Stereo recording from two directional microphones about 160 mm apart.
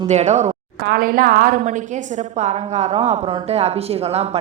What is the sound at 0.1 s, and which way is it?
Speech, 45° right (ahead or behind).